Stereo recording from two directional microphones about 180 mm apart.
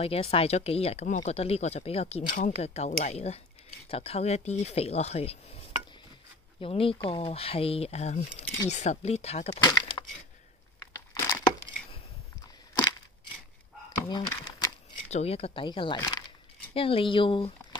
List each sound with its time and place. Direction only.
0.0 s speech: 35° left (ahead or behind)
2.2 s speech: 45° left (ahead or behind)
6.6 s speech: 30° left (ahead or behind)
10.8 s crushing: 10° left (ahead or behind)
14.0 s speech: 25° left (ahead or behind)
15.0 s speech: 35° left (ahead or behind)
16.0 s a sound: 15° left (ahead or behind)
16.7 s speech: 30° left (ahead or behind)